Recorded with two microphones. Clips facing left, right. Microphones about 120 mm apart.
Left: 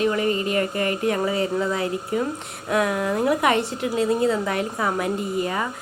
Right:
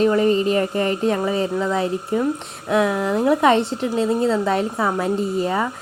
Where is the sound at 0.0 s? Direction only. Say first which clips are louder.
Right 5 dB; 30° right (ahead or behind).